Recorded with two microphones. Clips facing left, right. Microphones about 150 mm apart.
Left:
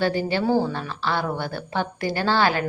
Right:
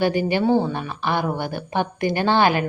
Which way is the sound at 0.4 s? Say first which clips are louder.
Right 2 dB; centre (ahead or behind).